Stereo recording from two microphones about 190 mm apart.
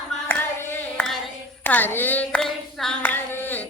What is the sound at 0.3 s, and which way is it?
Singing, 10° left (ahead or behind).